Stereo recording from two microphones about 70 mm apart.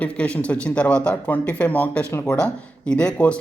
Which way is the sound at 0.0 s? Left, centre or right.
Centre.